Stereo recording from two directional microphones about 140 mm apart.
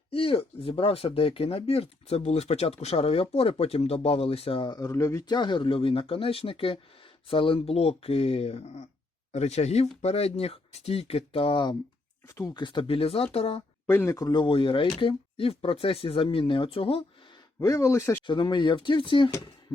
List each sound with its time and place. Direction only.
0.1 s speech: 40° left (ahead or behind); by 5.4 s 20° left (ahead or behind)
5.4 s speech: 35° left (ahead or behind)
12.3 s speech: 20° left (ahead or behind)
12.6 s speech: 40° left (ahead or behind)
13.8 s speech: 15° left (ahead or behind); by 17.0 s 40° left (ahead or behind)
17.6 s speech: 20° left (ahead or behind)
18.3 s speech: 35° left (ahead or behind)